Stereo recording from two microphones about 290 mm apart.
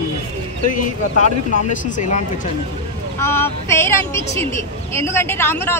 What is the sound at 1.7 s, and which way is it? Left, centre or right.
Speech, left.